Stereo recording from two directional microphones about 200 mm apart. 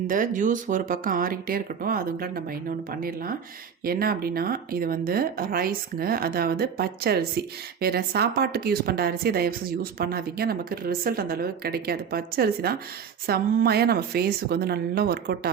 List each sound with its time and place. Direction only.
0.1 s speech: 40° right (ahead or behind)